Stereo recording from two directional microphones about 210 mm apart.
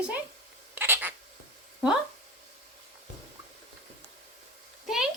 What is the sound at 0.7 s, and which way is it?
Cat, 10° right (ahead or behind).